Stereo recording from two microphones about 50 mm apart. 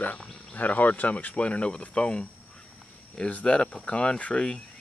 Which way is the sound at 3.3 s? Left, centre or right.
Left.